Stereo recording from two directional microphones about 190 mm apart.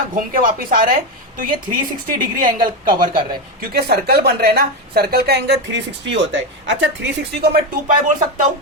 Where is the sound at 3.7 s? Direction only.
55° right (ahead or behind).